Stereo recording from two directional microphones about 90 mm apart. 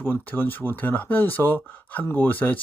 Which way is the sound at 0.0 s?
20° left (ahead or behind).